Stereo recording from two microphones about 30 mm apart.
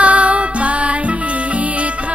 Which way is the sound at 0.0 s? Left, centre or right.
Right.